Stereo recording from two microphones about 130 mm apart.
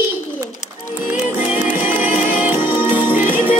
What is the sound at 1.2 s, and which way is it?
Music, 60° left (ahead or behind).